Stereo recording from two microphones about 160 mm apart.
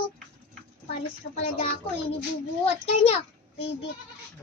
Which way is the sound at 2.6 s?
40° left (ahead or behind).